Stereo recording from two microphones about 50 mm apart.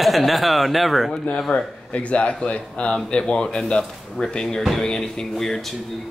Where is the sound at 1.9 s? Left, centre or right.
Left; by 5.8 s centre.